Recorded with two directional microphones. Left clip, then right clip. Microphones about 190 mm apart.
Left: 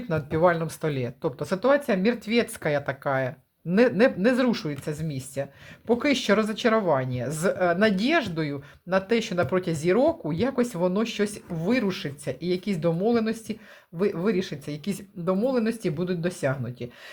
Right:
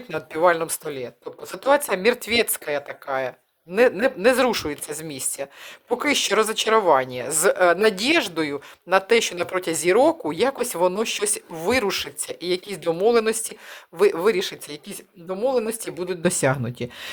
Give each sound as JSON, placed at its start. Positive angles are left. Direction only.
{"t": 0.1, "sound": "speech", "side_deg": -15}
{"t": 0.9, "sound": "speech", "side_deg": 0}
{"t": 1.5, "sound": "speech", "side_deg": -25}
{"t": 2.6, "sound": "speech", "side_deg": -10}